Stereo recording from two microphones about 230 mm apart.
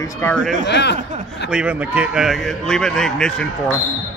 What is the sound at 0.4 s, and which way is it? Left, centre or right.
Speech, right.